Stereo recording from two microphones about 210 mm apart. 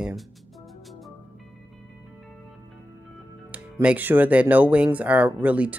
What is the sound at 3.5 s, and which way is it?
Speech, 5° right (ahead or behind).